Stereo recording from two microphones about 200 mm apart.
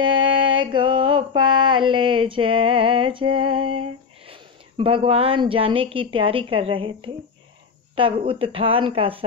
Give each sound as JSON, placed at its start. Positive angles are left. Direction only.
{"t": 0.0, "sound": "mantra", "side_deg": -25}
{"t": 8.0, "sound": "speech", "side_deg": -25}